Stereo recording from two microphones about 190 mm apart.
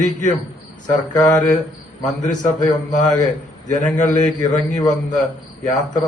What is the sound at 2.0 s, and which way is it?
Speech, 40° left (ahead or behind).